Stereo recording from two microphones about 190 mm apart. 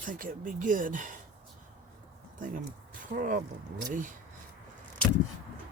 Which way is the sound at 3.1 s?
45° right (ahead or behind).